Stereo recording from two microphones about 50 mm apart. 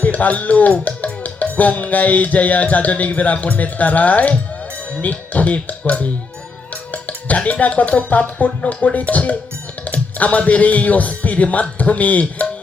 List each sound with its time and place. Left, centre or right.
0.0 s speech: left